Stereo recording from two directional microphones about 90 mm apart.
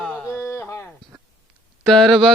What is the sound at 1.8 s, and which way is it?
Speech, 5° left (ahead or behind).